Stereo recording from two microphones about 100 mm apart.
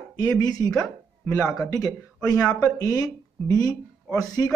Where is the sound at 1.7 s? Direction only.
35° left (ahead or behind).